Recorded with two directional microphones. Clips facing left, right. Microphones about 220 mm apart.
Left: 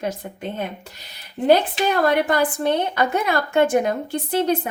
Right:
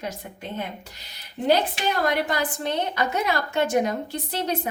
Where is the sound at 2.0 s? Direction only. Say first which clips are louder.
Left 6 dB; 55° left (ahead or behind).